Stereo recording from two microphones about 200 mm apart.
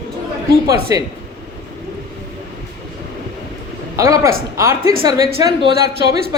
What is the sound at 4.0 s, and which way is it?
A woman's voice, 15° right (ahead or behind).